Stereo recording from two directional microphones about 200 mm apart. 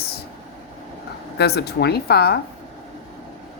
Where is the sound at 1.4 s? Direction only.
55° left (ahead or behind).